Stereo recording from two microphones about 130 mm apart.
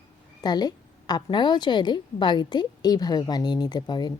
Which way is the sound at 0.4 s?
30° left (ahead or behind).